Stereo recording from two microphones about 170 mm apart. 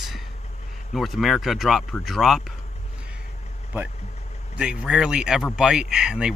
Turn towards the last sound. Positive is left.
turn(degrees=-5)  # may be behind; listen again after turning